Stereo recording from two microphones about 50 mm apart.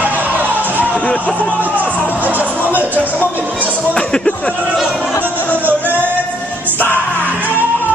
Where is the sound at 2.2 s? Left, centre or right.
Right.